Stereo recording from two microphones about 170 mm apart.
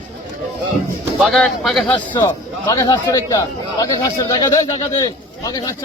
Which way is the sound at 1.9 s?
25° left (ahead or behind).